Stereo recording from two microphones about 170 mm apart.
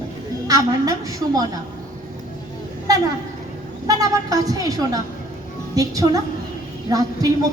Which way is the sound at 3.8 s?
20° right (ahead or behind).